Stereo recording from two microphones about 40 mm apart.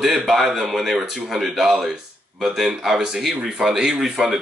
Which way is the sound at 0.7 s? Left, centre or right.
Centre.